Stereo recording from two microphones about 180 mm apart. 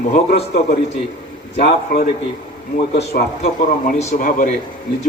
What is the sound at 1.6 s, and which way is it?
A man's voice, 50° left (ahead or behind).